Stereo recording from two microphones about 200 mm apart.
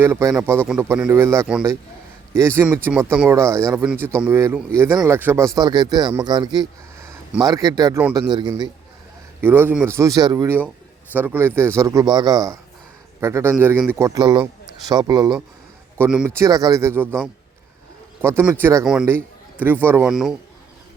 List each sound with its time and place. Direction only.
0.0 s a man's voice: 15° right (ahead or behind)
9.4 s a man's voice: 10° right (ahead or behind)
16.0 s speech: 5° right (ahead or behind)
16.2 s a man's voice: 15° right (ahead or behind)
18.2 s a man's voice: 10° right (ahead or behind)